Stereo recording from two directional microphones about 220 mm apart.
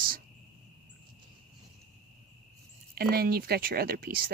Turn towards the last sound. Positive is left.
turn(degrees=-40)  # may be behind; listen again after turning